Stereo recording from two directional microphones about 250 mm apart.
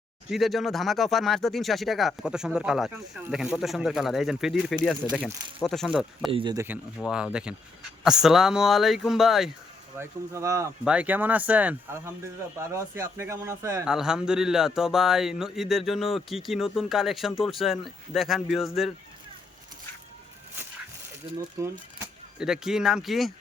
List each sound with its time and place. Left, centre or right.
0.3 s a man's voice: centre
6.3 s speech: centre
7.0 s a man's voice: centre
10.0 s a man's voice: centre
21.6 s speech: centre